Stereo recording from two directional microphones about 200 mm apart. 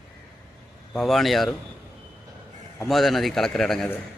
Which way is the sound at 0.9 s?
Centre (ahead or behind).